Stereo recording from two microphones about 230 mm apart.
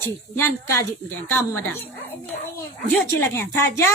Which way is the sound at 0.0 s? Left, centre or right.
Centre.